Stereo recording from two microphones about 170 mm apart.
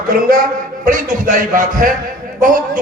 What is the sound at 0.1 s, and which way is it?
A man's voice, 55° right (ahead or behind).